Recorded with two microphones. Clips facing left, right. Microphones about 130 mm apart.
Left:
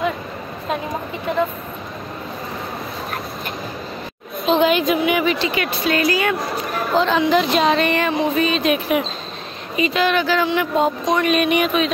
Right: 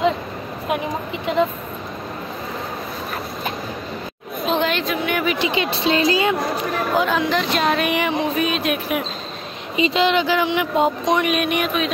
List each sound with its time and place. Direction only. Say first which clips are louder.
4.5 s chatter: left 5 dB; 5° left (ahead or behind)
4.8 s speech: left 5 dB; 10° left (ahead or behind)
5.4 s speech: right 1 dB; 25° right (ahead or behind)
7.0 s speech: left 5 dB; centre (ahead or behind)
9.8 s speech: right 1 dB; 25° right (ahead or behind)
11.2 s speech: left 3 dB; centre (ahead or behind)